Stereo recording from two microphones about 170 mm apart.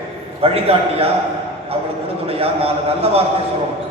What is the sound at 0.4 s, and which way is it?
Speech, 35° right (ahead or behind).